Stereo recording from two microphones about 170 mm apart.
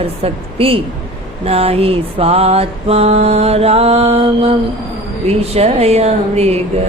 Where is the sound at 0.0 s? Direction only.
35° right (ahead or behind).